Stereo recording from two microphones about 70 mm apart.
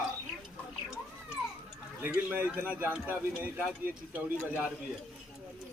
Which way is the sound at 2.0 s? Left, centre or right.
Right.